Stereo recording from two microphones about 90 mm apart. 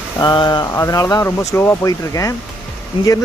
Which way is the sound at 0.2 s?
55° left (ahead or behind).